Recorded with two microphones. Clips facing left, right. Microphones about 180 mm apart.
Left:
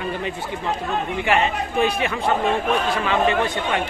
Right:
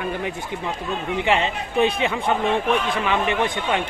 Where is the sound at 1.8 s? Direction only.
20° right (ahead or behind).